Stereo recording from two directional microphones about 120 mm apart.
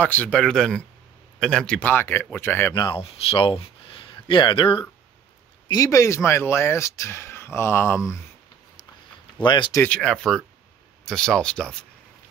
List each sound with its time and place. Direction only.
0.0 s speech: 15° left (ahead or behind)
3.0 s speech: 55° left (ahead or behind)
5.7 s speech: 25° left (ahead or behind)
9.4 s speech: 40° left (ahead or behind)
9.8 s speech: 10° left (ahead or behind)